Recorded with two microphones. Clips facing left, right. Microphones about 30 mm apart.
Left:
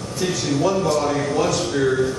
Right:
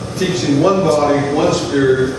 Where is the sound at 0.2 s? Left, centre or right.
Right.